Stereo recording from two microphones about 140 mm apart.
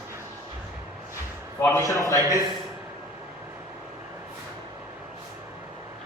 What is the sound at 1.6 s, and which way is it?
Speech, 20° left (ahead or behind).